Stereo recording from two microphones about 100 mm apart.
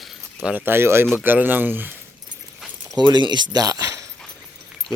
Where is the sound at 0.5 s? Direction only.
20° right (ahead or behind).